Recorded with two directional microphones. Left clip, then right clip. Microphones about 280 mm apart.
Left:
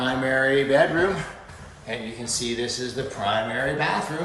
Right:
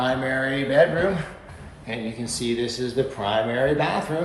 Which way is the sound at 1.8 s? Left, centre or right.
Centre.